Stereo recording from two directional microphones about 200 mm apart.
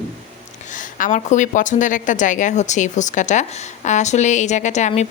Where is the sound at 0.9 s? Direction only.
40° left (ahead or behind).